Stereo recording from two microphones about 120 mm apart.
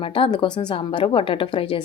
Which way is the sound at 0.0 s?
50° left (ahead or behind).